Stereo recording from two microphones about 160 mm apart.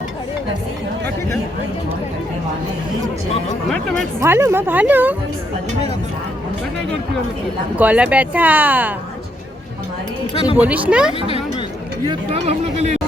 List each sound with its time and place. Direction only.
4.2 s speech: 15° right (ahead or behind)
7.8 s speech: 10° right (ahead or behind)
10.6 s speech: 10° right (ahead or behind)
12.0 s speech: 40° right (ahead or behind)